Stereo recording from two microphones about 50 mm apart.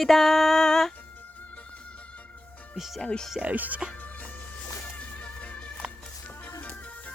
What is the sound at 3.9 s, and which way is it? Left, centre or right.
Music, left.